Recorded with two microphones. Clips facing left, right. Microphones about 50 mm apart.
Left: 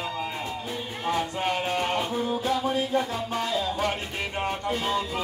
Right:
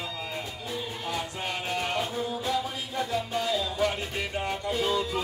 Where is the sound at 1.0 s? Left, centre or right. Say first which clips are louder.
Left 9 dB; left.